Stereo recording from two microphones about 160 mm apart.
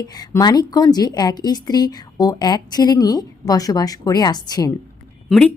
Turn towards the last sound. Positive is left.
turn(degrees=5)  # may be behind; listen again after turning